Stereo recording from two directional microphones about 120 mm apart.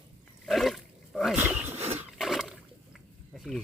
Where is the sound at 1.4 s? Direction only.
15° right (ahead or behind).